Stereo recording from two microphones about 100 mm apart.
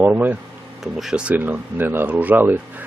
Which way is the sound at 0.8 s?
Centre (ahead or behind).